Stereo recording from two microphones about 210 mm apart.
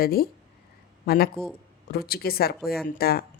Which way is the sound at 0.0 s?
45° left (ahead or behind).